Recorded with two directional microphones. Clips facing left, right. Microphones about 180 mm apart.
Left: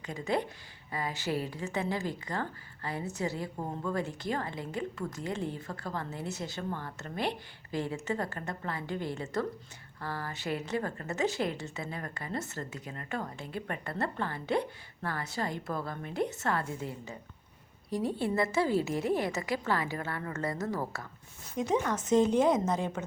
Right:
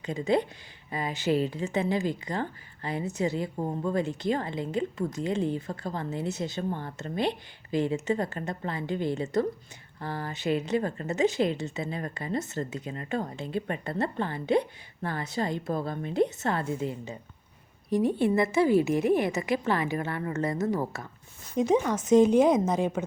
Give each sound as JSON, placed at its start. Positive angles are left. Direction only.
{"t": 0.0, "sound": "a woman's voice", "side_deg": -20}